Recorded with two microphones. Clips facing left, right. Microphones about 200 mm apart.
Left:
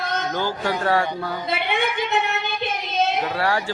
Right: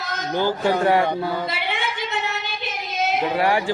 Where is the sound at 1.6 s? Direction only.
55° left (ahead or behind).